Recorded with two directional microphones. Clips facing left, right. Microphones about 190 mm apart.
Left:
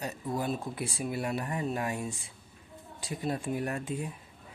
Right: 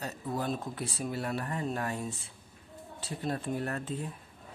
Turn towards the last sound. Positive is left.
turn(degrees=10)  # may be behind; listen again after turning